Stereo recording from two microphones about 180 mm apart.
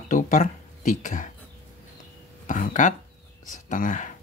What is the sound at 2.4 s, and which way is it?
Speech, 45° left (ahead or behind).